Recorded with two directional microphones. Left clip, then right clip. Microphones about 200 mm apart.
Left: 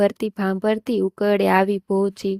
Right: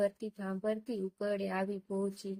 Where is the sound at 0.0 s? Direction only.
50° left (ahead or behind).